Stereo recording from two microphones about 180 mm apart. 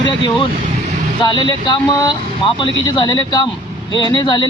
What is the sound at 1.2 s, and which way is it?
Speech, 25° left (ahead or behind).